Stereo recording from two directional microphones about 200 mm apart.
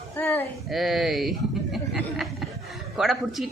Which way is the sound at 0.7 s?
Centre (ahead or behind).